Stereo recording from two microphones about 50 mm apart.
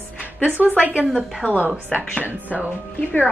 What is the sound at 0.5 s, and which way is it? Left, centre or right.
Speech, right.